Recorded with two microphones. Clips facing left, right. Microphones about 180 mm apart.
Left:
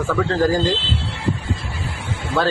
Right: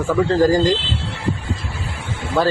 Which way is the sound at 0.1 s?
15° right (ahead or behind).